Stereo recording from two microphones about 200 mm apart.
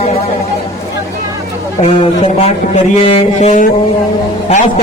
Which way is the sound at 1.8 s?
30° left (ahead or behind).